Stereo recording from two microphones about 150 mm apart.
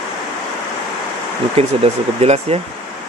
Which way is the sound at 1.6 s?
45° right (ahead or behind).